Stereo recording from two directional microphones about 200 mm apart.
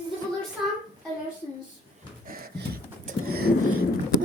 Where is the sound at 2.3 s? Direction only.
50° right (ahead or behind).